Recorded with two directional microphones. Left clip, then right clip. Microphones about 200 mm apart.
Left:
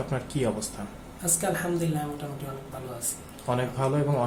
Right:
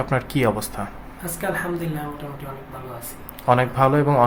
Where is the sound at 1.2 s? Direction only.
5° left (ahead or behind).